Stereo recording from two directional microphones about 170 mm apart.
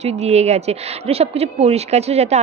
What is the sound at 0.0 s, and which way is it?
Speech, 40° right (ahead or behind).